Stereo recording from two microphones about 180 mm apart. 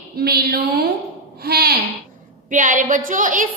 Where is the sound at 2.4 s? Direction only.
45° right (ahead or behind).